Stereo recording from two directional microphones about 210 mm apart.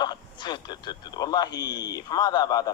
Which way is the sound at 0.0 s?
20° left (ahead or behind).